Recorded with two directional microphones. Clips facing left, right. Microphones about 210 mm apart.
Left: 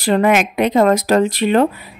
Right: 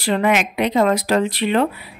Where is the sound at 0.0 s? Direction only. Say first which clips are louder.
Left 4 dB; 45° left (ahead or behind).